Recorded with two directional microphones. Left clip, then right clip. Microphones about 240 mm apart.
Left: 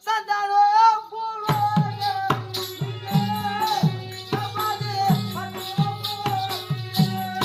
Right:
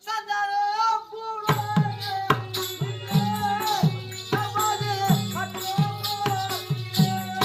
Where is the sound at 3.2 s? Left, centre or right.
Centre.